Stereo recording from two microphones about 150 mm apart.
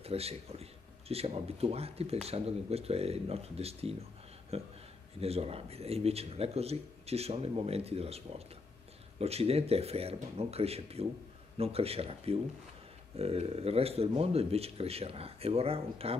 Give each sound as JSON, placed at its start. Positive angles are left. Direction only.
{"t": 0.0, "sound": "speech", "side_deg": -40}